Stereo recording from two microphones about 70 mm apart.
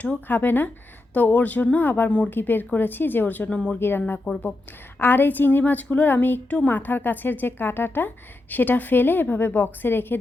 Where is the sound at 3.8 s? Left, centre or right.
Left.